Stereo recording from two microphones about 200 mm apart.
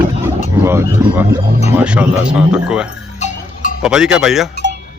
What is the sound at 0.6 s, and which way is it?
Speech, 10° right (ahead or behind).